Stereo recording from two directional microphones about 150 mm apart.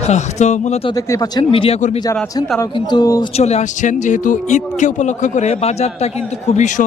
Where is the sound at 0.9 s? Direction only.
25° left (ahead or behind).